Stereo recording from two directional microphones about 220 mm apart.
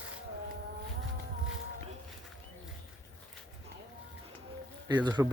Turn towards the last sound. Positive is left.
turn(degrees=-20)  # may be behind; listen again after turning